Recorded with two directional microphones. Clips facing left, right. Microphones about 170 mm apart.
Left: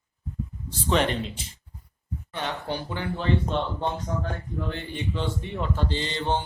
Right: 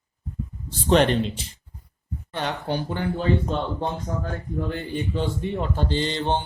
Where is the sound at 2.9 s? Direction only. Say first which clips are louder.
Right 2 dB; 45° right (ahead or behind).